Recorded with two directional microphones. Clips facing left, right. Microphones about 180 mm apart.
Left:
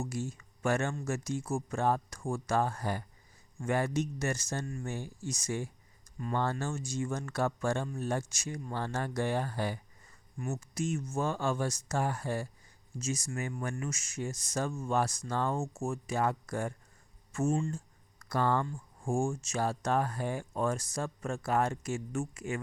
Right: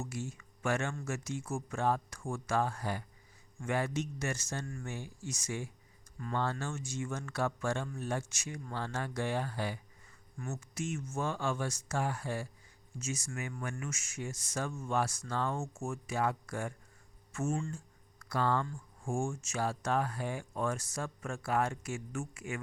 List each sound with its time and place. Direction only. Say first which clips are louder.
0.0 s speech: left 4 dB; 40° left (ahead or behind)
10.3 s speech: left 4 dB; 15° left (ahead or behind)
10.8 s speech: left 4 dB; 35° left (ahead or behind)
17.7 s a sound: left 4 dB; 40° left (ahead or behind)
19.0 s speech: left 4 dB; 35° left (ahead or behind)